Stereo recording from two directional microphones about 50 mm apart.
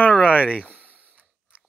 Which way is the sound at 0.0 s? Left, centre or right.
Left.